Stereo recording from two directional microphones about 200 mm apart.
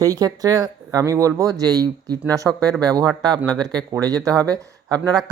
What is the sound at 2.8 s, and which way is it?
Speech, 20° right (ahead or behind).